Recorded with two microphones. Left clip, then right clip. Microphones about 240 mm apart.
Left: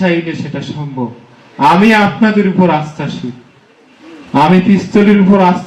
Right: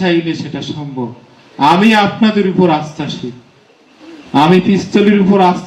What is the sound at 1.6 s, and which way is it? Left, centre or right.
A man's voice, right.